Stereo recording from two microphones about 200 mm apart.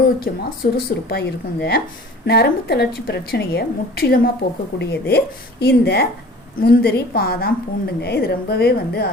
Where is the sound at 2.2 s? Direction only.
55° left (ahead or behind).